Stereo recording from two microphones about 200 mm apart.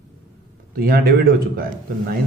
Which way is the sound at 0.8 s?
50° right (ahead or behind).